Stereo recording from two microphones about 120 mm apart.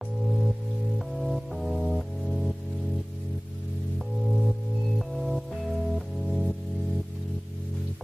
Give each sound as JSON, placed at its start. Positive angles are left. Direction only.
{"t": 0.9, "sound": "music", "side_deg": 0}
{"t": 4.4, "sound": "music", "side_deg": 0}